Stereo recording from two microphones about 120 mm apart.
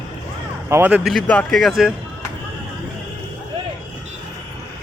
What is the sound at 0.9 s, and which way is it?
Speech, centre (ahead or behind).